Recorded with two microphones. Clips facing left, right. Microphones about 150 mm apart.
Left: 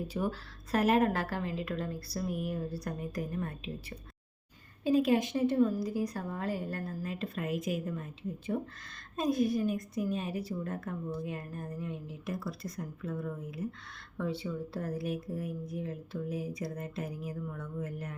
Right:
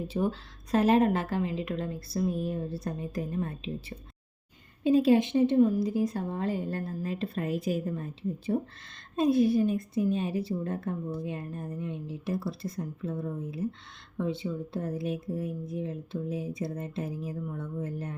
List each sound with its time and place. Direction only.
0.1 s a woman's voice: 25° right (ahead or behind)